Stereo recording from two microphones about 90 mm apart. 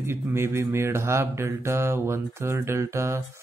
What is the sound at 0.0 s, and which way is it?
Speech, 30° right (ahead or behind).